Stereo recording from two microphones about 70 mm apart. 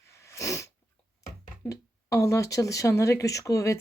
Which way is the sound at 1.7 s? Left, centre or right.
Left.